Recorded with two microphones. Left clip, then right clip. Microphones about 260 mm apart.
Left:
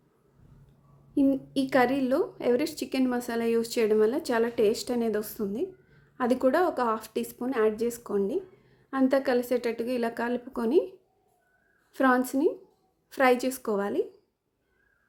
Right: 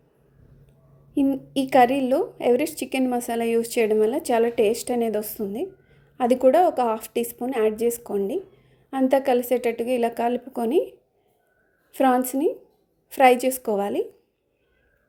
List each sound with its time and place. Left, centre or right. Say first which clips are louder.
1.2 s a woman's voice: right 2 dB; centre
10.7 s speech: right 2 dB; left
11.9 s speech: right 4 dB; centre